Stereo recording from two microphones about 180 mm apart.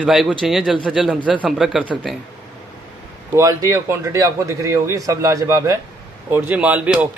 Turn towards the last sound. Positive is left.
turn(degrees=-10)  # may be behind; listen again after turning